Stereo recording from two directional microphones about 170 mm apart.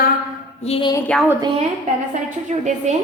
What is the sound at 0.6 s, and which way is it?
Speech, 35° left (ahead or behind).